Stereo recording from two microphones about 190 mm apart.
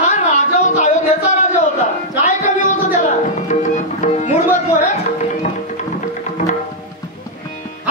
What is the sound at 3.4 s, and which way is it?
Tabla, 40° left (ahead or behind).